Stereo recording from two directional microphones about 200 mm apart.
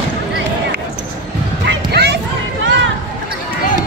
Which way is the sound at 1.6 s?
55° right (ahead or behind).